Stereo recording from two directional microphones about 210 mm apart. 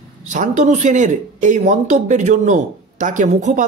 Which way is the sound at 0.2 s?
35° right (ahead or behind).